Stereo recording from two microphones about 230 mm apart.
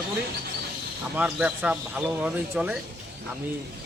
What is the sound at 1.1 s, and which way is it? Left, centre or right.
Speech, centre.